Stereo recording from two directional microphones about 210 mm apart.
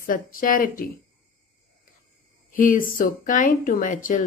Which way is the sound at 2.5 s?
40° left (ahead or behind).